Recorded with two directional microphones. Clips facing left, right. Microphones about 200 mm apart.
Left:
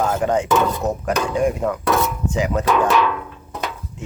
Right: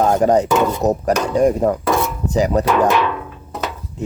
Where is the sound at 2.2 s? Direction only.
40° right (ahead or behind).